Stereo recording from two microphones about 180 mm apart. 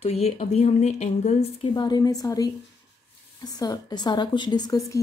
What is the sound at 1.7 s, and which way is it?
Speech, 20° left (ahead or behind).